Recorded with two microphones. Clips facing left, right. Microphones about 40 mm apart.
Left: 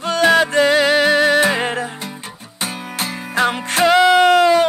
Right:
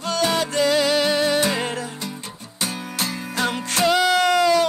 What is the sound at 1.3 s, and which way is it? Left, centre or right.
Music, left.